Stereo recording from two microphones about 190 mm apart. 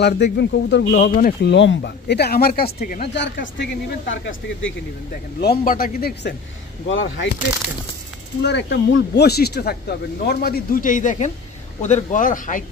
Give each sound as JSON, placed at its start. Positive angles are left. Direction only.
{"t": 0.0, "sound": "speech", "side_deg": 60}
{"t": 1.5, "sound": "speech", "side_deg": 70}
{"t": 4.1, "sound": "speech", "side_deg": 90}
{"t": 5.4, "sound": "speech", "side_deg": 50}
{"t": 6.9, "sound": "speech", "side_deg": 85}
{"t": 8.4, "sound": "speech", "side_deg": 65}